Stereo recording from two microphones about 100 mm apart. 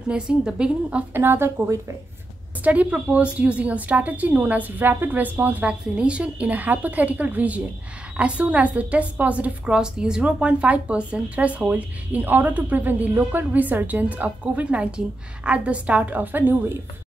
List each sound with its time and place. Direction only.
0.1 s a woman's voice: 10° right (ahead or behind)
1.2 s speech: 25° right (ahead or behind)
2.6 s a woman's voice: 15° right (ahead or behind)